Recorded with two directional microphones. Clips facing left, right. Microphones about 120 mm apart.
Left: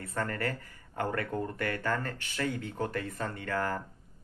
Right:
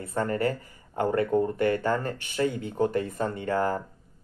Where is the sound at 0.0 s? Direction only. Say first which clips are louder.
Right 7 dB; 20° right (ahead or behind).